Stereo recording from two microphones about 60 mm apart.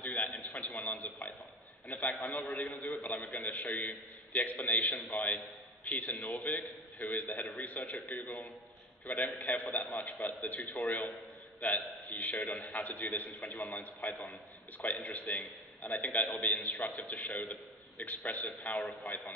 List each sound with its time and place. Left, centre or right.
0.0 s a sound: left
0.3 s a man's voice: left
2.8 s a man's voice: left